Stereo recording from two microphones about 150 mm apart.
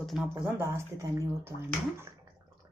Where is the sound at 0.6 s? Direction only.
15° right (ahead or behind).